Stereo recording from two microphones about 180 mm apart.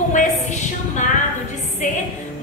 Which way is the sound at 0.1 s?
40° left (ahead or behind).